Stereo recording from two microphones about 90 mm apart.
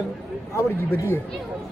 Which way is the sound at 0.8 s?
25° left (ahead or behind).